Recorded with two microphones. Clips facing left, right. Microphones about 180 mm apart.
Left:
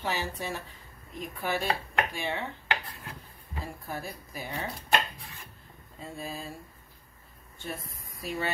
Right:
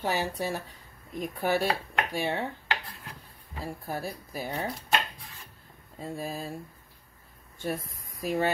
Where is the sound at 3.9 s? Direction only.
40° right (ahead or behind).